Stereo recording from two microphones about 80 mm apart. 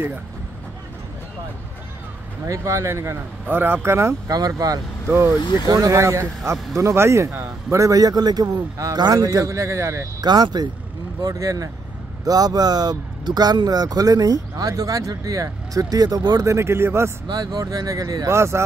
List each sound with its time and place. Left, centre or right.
2.4 s speech: right
3.4 s speech: right
4.3 s speech: right
5.0 s speech: right
5.7 s speech: right
10.2 s speech: right
11.2 s speech: right
16.4 s speech: right
17.3 s speech: right